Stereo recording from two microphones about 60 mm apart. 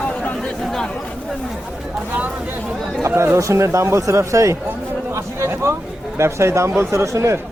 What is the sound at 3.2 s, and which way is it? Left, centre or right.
Speech, right.